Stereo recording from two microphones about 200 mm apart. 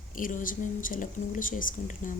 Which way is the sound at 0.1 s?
40° left (ahead or behind).